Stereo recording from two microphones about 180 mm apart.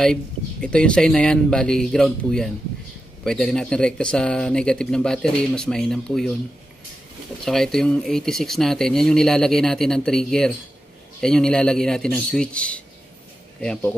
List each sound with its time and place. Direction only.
0.0 s speech: 5° left (ahead or behind)
7.4 s speech: centre (ahead or behind)